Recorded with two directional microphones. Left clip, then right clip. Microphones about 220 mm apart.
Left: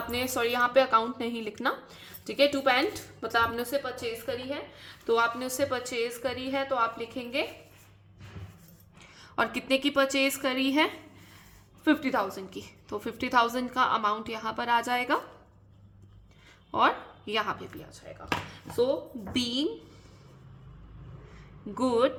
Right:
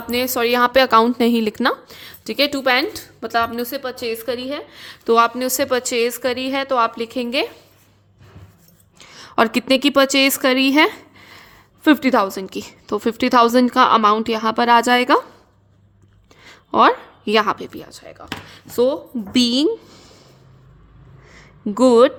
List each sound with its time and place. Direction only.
0.1 s a woman's voice: 45° right (ahead or behind)
9.0 s a woman's voice: 50° right (ahead or behind)
16.4 s a woman's voice: 55° right (ahead or behind)
21.2 s a sound: 50° right (ahead or behind)